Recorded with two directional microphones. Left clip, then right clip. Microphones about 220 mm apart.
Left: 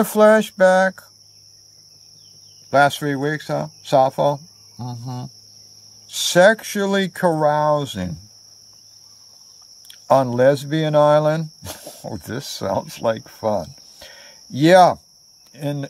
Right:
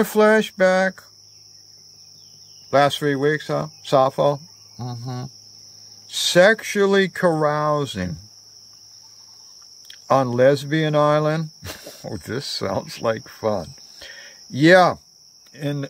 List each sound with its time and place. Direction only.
0.0 s speech: 5° right (ahead or behind)
2.7 s speech: 5° right (ahead or behind)
9.8 s speech: 10° right (ahead or behind)